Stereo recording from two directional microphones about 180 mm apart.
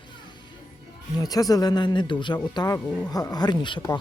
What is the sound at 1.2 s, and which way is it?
Speech, 20° left (ahead or behind).